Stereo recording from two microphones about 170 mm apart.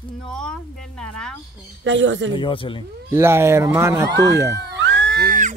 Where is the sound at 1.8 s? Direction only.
90° right.